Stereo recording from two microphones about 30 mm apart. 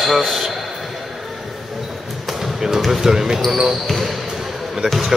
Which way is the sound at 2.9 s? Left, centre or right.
Centre.